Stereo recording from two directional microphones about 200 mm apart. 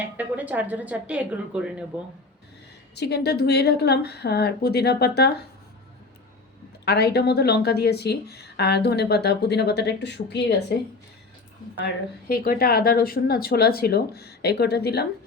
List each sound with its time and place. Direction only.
0.2 s a woman's voice: 10° right (ahead or behind)
2.9 s speech: 55° left (ahead or behind)
6.8 s a woman's voice: 55° left (ahead or behind)
12.3 s speech: 50° left (ahead or behind)